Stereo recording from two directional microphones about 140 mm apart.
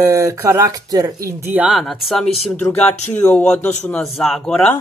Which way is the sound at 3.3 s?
10° left (ahead or behind).